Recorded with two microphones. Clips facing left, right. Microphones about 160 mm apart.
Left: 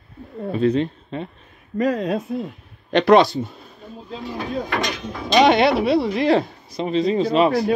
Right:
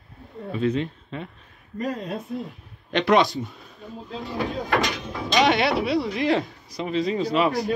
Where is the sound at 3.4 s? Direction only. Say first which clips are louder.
Left 4 dB; 40° left (ahead or behind).